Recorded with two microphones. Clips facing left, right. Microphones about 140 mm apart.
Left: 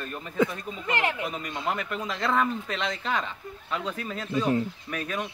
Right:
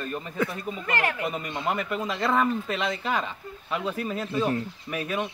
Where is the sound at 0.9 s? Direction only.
20° left (ahead or behind).